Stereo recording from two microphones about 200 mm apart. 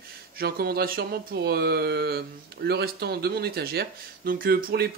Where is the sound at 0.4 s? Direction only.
50° right (ahead or behind).